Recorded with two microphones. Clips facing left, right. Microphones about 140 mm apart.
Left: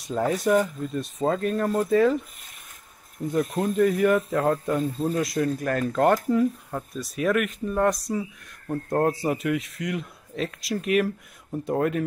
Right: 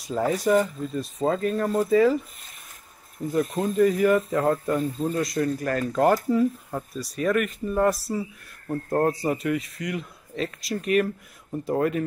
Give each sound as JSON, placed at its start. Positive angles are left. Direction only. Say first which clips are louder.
{"t": 0.0, "sound": "speech", "louder": "even", "side_deg": 0}
{"t": 3.3, "sound": "speech", "louder": "even", "side_deg": 0}